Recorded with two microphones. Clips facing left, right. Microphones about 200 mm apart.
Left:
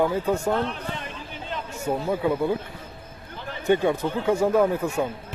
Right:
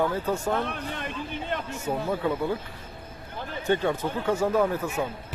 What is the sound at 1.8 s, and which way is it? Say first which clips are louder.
Speech: left 4 dB; 10° left (ahead or behind).